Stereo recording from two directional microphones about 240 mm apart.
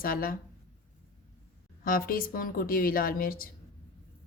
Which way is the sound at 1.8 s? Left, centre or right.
Left.